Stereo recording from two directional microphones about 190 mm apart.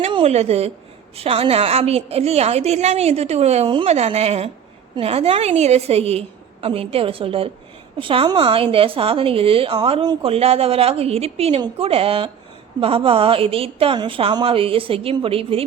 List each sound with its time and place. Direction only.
0.0 s a woman's voice: 30° right (ahead or behind)